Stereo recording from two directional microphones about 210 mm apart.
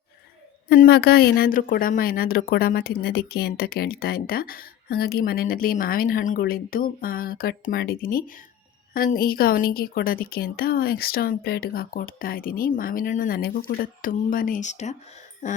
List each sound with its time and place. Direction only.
0.7 s speech: 50° left (ahead or behind)